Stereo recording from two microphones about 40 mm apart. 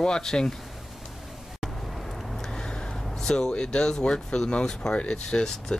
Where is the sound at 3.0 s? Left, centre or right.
Centre.